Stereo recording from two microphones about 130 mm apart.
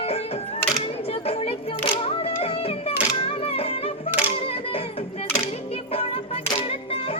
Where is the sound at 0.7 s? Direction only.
50° left (ahead or behind).